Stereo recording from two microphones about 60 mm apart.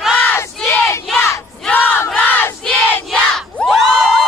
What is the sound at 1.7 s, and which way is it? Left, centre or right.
Crowd, left.